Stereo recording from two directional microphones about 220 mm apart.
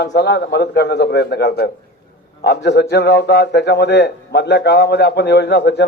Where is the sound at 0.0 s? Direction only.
50° left (ahead or behind).